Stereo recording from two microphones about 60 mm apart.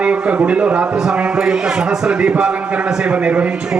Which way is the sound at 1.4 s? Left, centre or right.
Centre.